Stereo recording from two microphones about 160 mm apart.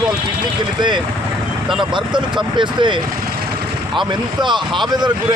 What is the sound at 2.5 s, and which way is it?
Speech, 30° right (ahead or behind).